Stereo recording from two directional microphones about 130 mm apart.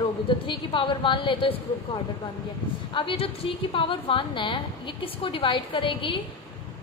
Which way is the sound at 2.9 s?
40° left (ahead or behind).